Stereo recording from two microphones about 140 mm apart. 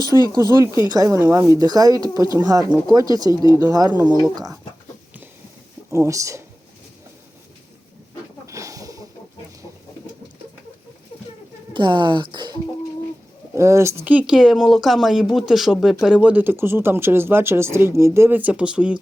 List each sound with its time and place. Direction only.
0.1 s speech: 25° right (ahead or behind)
3.2 s speech: 30° left (ahead or behind)
3.7 s speech: 25° right (ahead or behind)
5.9 s speech: 20° right (ahead or behind)
8.4 s a sound: 20° right (ahead or behind)
11.7 s speech: 35° right (ahead or behind)
13.6 s speech: 20° right (ahead or behind)